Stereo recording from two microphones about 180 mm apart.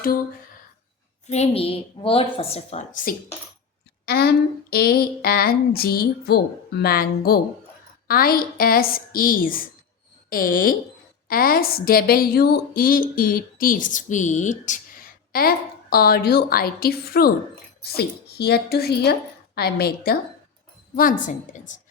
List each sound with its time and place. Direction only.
1.3 s a woman's voice: 35° left (ahead or behind)
4.0 s a woman's voice: 60° left (ahead or behind); by 14.8 s 45° left (ahead or behind)
15.3 s a woman's voice: 55° left (ahead or behind)